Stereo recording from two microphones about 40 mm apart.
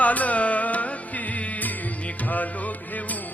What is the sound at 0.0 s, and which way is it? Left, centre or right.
Music, left.